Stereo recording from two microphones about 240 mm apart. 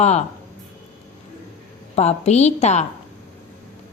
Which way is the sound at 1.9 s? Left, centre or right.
Left.